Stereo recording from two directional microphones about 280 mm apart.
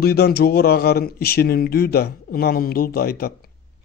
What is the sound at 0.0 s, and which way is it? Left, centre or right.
A man's voice, left.